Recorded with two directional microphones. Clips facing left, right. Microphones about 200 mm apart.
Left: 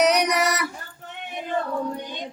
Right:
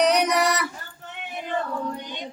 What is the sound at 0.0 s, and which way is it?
Music, 10° left (ahead or behind).